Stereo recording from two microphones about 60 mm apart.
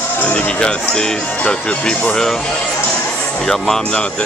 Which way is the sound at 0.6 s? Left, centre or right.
Centre.